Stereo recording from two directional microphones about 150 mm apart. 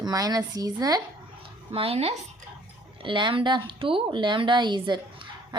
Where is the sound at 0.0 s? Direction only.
25° right (ahead or behind).